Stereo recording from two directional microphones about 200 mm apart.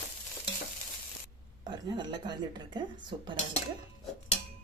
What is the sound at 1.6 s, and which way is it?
Speech, 20° right (ahead or behind).